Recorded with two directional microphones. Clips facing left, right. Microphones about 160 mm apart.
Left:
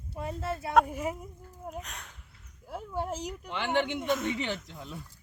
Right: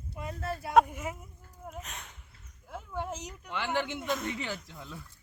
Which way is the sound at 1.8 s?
Centre (ahead or behind).